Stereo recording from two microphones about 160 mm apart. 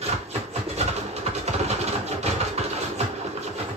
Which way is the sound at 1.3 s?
40° right (ahead or behind).